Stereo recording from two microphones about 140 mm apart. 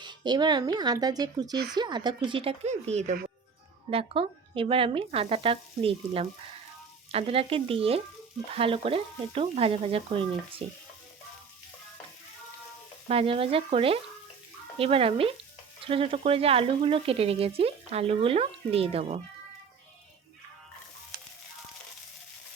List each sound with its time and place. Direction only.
0.0 s speech: 30° right (ahead or behind); by 3.2 s 50° right (ahead or behind)
3.8 s speech: 40° right (ahead or behind)
13.1 s speech: 40° right (ahead or behind)